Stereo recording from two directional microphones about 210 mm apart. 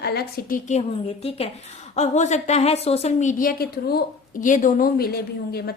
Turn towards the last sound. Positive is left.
turn(degrees=50)  # may be behind; listen again after turning